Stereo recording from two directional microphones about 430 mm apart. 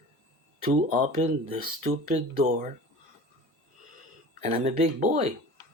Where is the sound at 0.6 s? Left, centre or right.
Centre.